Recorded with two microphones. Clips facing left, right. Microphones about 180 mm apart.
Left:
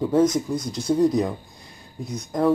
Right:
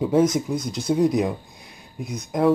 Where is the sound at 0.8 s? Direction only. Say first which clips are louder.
Even; 5° right (ahead or behind).